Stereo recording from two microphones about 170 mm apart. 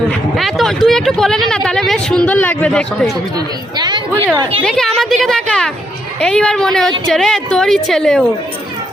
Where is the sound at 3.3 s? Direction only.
25° right (ahead or behind).